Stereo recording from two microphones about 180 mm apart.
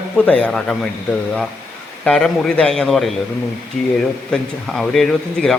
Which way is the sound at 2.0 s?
5° left (ahead or behind).